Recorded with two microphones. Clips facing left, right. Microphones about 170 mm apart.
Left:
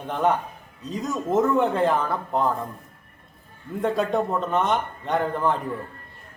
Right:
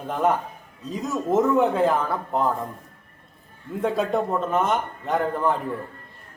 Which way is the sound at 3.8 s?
Centre (ahead or behind).